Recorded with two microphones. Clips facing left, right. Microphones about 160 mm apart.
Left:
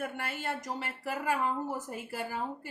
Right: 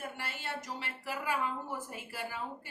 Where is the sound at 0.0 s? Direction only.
50° left (ahead or behind).